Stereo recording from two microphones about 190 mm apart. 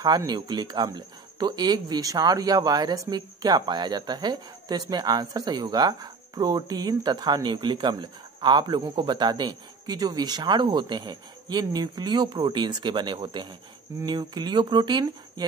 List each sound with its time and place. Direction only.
0.0 s speech: 20° right (ahead or behind)